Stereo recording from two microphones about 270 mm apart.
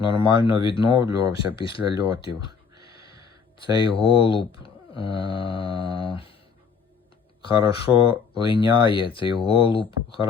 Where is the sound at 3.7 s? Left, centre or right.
Centre.